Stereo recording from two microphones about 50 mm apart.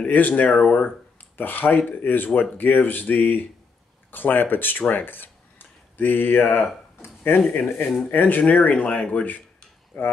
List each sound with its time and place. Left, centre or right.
0.0 s speech: left
1.1 s speech: left
9.9 s cutlery: left